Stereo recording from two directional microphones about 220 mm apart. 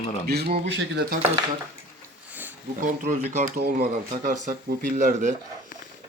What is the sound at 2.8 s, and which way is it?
Speech, 35° right (ahead or behind).